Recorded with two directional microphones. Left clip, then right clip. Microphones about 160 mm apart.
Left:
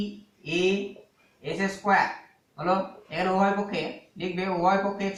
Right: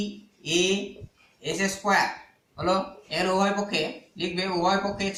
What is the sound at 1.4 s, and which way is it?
Speech, 20° right (ahead or behind).